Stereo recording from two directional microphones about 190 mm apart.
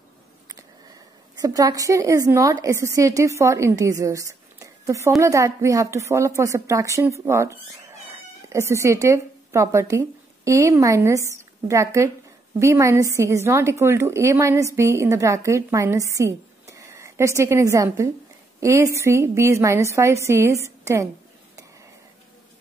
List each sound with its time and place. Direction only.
1.3 s a woman's voice: 20° right (ahead or behind)